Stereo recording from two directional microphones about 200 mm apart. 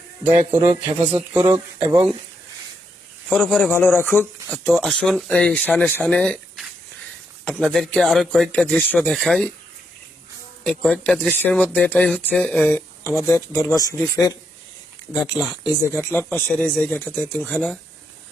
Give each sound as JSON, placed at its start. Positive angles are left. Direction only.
{"t": 0.5, "sound": "speech", "side_deg": -15}
{"t": 3.2, "sound": "speech", "side_deg": 0}
{"t": 10.6, "sound": "speech", "side_deg": 5}
{"t": 15.2, "sound": "speech", "side_deg": 0}
{"t": 16.0, "sound": "speech", "side_deg": 10}